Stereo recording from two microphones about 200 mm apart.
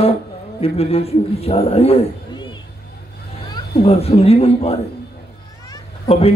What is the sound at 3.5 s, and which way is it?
A man's voice, 30° left (ahead or behind).